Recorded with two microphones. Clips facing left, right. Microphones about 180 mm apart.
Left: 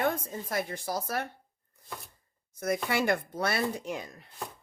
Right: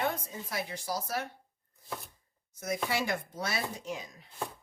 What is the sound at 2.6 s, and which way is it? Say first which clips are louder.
Speech: left 4 dB; 55° left (ahead or behind).